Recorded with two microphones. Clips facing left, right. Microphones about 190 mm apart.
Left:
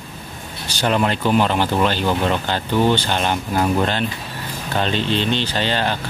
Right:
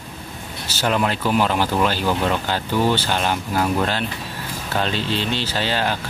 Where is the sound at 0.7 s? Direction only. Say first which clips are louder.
Left 2 dB; 5° right (ahead or behind).